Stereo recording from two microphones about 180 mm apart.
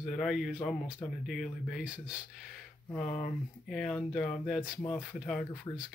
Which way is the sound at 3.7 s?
Centre (ahead or behind).